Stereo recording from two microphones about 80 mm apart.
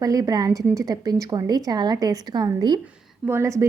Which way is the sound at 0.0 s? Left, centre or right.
Right.